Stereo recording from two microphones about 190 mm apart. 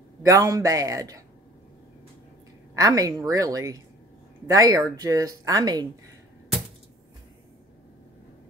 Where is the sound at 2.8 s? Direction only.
20° right (ahead or behind).